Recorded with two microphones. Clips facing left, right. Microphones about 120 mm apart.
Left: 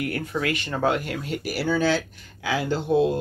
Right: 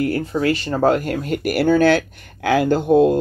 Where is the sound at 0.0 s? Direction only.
30° right (ahead or behind).